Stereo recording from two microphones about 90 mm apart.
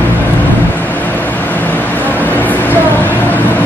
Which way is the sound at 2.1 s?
20° left (ahead or behind).